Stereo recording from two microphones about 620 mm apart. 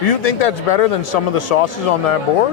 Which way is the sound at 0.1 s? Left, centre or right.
Left.